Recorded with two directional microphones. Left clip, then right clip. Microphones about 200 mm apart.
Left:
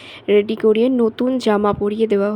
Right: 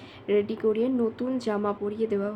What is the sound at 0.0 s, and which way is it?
A woman's voice, 45° left (ahead or behind).